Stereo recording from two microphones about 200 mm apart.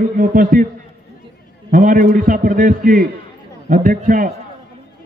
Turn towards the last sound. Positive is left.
turn(degrees=-45)  # may be behind; listen again after turning